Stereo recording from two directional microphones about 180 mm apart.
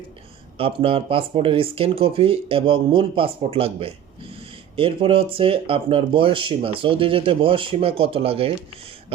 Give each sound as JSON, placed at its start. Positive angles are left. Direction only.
{"t": 0.5, "sound": "speech", "side_deg": -30}